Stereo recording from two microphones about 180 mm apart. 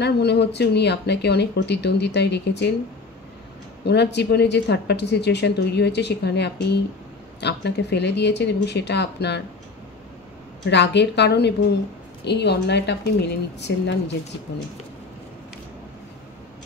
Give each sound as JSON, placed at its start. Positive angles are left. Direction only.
{"t": 0.0, "sound": "speech", "side_deg": 65}
{"t": 3.8, "sound": "speech", "side_deg": 65}
{"t": 10.7, "sound": "speech", "side_deg": 70}